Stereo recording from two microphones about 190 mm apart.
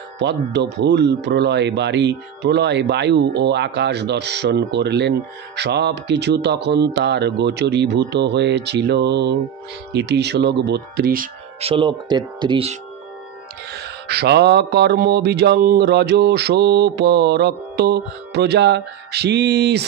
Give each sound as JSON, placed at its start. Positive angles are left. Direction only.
{"t": 0.2, "sound": "speech", "side_deg": -65}
{"t": 11.6, "sound": "speech", "side_deg": -25}
{"t": 13.7, "sound": "speech", "side_deg": -60}